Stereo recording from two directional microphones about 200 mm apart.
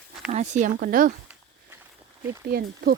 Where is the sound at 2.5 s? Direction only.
50° right (ahead or behind).